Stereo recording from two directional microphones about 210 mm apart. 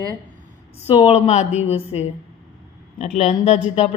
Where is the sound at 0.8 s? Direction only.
25° left (ahead or behind).